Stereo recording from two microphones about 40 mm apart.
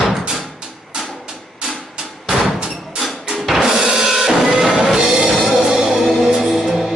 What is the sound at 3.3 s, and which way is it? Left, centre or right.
Music, centre.